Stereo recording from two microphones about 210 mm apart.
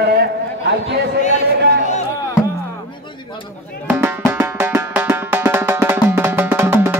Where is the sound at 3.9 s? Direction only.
10° right (ahead or behind).